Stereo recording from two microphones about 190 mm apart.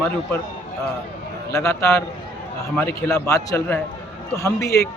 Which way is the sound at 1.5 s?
15° left (ahead or behind).